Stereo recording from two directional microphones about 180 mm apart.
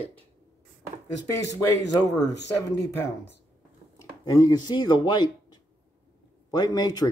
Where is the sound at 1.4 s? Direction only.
20° left (ahead or behind).